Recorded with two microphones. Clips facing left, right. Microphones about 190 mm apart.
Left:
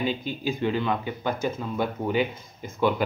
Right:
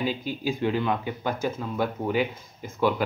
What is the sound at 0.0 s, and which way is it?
Speech, 5° right (ahead or behind).